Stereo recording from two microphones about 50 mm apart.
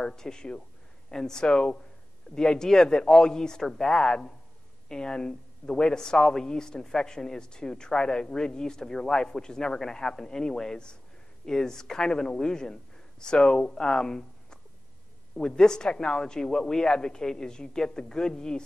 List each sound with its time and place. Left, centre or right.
0.0 s a woman's voice: centre